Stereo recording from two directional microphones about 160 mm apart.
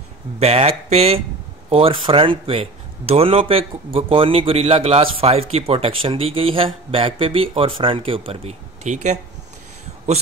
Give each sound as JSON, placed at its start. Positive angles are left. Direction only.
{"t": 0.4, "sound": "a man's voice", "side_deg": -40}